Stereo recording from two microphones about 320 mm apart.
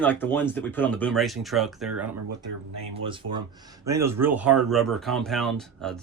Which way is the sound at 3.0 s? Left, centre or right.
Centre.